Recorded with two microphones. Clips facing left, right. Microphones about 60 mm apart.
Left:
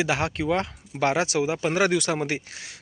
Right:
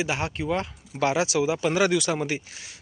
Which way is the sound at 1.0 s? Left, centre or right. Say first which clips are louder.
Even; left.